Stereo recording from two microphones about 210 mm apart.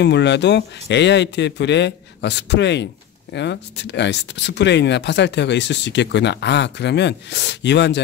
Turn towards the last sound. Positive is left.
turn(degrees=55)  # may be behind; listen again after turning